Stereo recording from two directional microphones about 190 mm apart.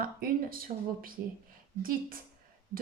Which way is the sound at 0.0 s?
50° right (ahead or behind).